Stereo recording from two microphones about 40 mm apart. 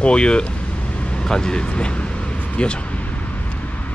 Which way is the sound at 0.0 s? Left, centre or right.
Left.